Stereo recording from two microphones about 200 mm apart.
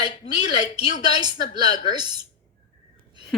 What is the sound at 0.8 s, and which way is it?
Speech, 30° left (ahead or behind).